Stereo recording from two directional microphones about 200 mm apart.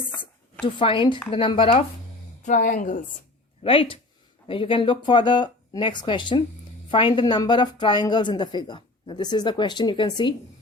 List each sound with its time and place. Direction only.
0.6 s a woman's voice: 25° left (ahead or behind)
2.4 s a woman's voice: 40° left (ahead or behind)
3.6 s a woman's voice: 25° left (ahead or behind)